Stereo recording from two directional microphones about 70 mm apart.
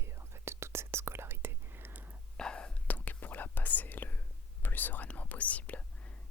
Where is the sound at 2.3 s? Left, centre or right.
Centre.